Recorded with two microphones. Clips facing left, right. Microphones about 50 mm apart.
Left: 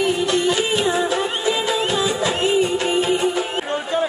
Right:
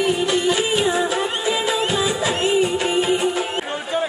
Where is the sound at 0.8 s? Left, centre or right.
Centre.